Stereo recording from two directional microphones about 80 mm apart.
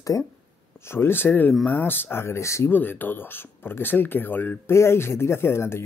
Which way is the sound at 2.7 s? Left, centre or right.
Left.